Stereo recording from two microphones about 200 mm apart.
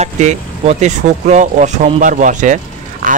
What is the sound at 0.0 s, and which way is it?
Speech, 35° right (ahead or behind).